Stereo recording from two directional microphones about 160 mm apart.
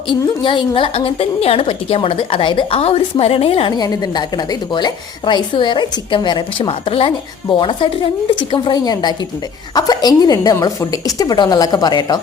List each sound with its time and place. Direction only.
0.1 s a woman's voice: 30° left (ahead or behind)